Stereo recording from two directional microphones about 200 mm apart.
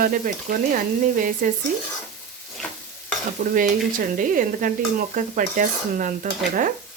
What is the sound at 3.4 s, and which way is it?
Frying, 45° right (ahead or behind).